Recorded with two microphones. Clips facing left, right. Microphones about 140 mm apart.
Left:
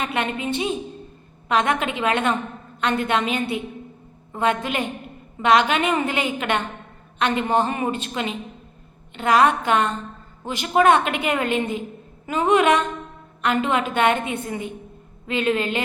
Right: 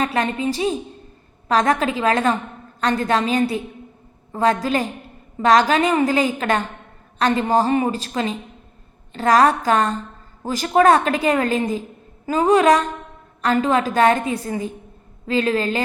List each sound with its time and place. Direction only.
0.0 s a woman's voice: 35° right (ahead or behind)